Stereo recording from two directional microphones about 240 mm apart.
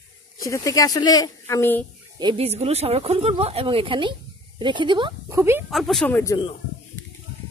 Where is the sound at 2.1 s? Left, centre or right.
Right.